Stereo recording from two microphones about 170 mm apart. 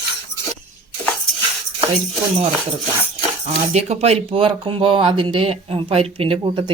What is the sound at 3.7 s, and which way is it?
Speech, 40° right (ahead or behind).